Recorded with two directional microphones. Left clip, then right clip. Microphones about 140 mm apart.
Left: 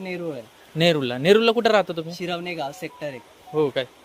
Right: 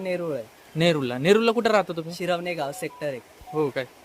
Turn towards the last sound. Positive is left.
turn(degrees=0)  # may be behind; listen again after turning